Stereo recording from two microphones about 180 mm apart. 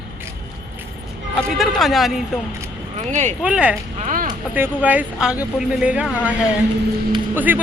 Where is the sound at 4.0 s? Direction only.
45° right (ahead or behind).